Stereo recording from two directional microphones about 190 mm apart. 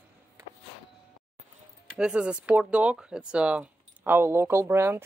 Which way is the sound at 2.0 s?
5° right (ahead or behind).